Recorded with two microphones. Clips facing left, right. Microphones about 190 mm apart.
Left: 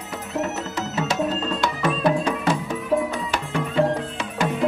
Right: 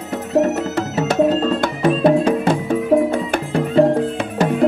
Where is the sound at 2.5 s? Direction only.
55° right (ahead or behind).